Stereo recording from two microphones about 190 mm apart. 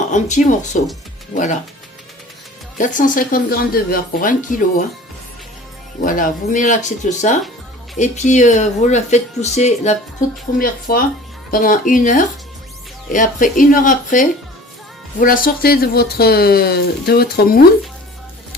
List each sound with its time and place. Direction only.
0.1 s speech: 40° left (ahead or behind)
2.7 s speech: 45° left (ahead or behind)
6.0 s speech: 45° left (ahead or behind)